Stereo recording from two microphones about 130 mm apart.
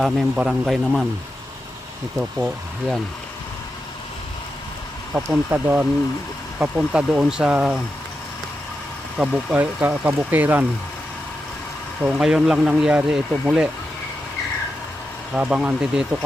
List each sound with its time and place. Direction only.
0.0 s a man's voice: centre (ahead or behind)
5.1 s speech: 15° right (ahead or behind)
9.1 s speech: 10° right (ahead or behind)
12.0 s speech: 5° right (ahead or behind)
15.3 s speech: 10° right (ahead or behind)